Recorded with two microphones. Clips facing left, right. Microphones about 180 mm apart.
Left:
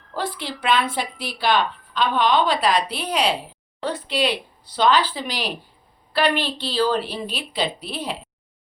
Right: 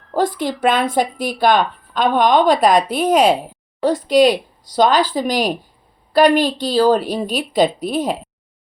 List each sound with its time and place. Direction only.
0.1 s speech: 45° right (ahead or behind)